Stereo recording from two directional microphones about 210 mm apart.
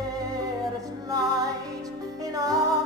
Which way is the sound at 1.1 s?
15° right (ahead or behind).